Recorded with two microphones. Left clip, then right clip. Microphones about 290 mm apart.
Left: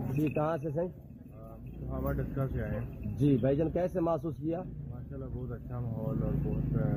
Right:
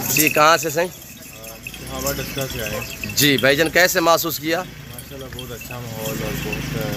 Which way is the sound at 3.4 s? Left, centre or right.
Right.